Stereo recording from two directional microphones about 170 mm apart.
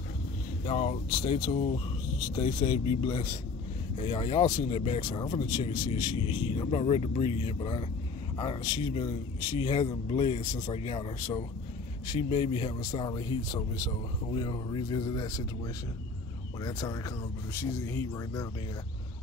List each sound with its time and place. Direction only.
0.7 s speech: 40° left (ahead or behind)
12.8 s speech: 25° left (ahead or behind)
17.6 s speech: 15° left (ahead or behind)